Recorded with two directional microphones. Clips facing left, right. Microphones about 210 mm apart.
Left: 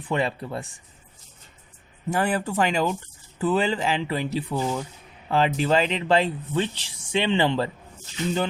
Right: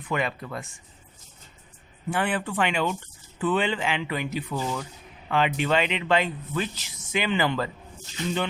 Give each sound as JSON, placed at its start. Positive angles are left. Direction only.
{"t": 0.0, "sound": "speech", "side_deg": 30}
{"t": 2.0, "sound": "speech", "side_deg": 40}